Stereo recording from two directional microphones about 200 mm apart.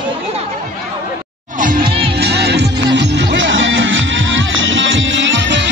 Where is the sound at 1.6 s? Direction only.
45° right (ahead or behind).